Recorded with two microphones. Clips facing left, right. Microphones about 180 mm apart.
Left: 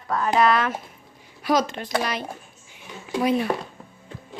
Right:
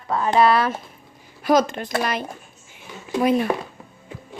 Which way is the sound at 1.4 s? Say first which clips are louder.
Right 4 dB; 50° right (ahead or behind).